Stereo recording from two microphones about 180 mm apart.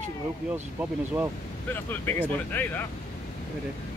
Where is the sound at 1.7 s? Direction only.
10° left (ahead or behind).